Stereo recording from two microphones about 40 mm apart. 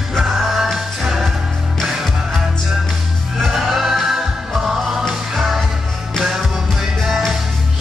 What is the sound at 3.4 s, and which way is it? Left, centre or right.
Music, centre.